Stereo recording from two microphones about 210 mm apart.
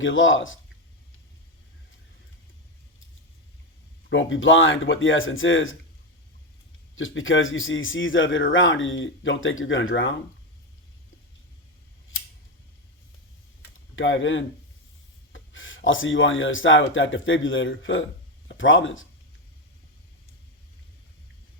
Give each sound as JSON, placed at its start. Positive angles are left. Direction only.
{"t": 0.0, "sound": "a man's voice", "side_deg": 65}
{"t": 4.1, "sound": "a man's voice", "side_deg": 65}
{"t": 6.9, "sound": "a man's voice", "side_deg": 70}
{"t": 13.9, "sound": "a man's voice", "side_deg": 60}